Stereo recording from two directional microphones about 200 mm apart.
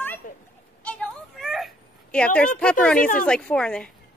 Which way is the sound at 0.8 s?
5° left (ahead or behind).